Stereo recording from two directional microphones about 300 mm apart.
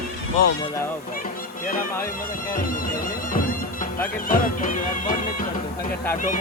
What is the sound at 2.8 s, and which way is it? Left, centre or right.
Music, left.